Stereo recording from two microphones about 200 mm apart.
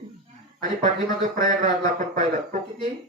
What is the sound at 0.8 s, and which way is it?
Speech, 40° right (ahead or behind).